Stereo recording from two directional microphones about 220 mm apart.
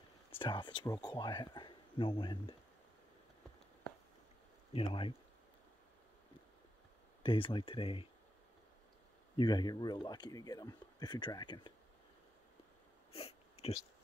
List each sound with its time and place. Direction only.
0.4 s speech: 20° left (ahead or behind)
4.7 s speech: 25° left (ahead or behind)
7.2 s speech: 25° left (ahead or behind)
9.4 s speech: 20° left (ahead or behind)
13.1 s a sound: 25° left (ahead or behind)